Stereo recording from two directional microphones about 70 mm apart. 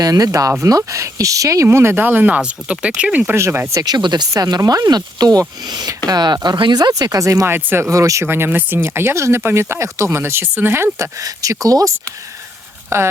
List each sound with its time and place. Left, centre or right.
0.0 s speech: right
1.6 s speech: right
2.2 s speech: centre
3.3 s speech: right
3.8 s speech: right
4.3 s speech: right
7.2 s speech: right
7.4 s speech: right
7.9 s speech: right
8.3 s speech: right
10.9 s speech: right